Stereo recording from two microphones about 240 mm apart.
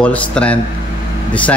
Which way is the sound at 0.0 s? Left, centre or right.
Centre.